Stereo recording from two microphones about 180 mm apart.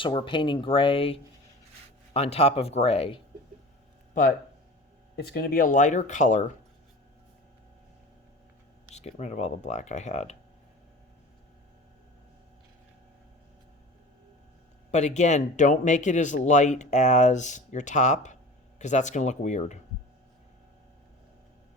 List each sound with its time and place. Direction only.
0.0 s speech: 25° left (ahead or behind)
4.1 s speech: 45° left (ahead or behind)
5.1 s speech: 60° left (ahead or behind); by 6.4 s 40° left (ahead or behind)
9.0 s speech: 35° left (ahead or behind)
14.8 s speech: 40° left (ahead or behind)